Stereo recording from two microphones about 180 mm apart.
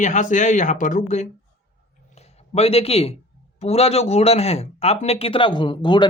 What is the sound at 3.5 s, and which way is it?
Speech, 35° left (ahead or behind).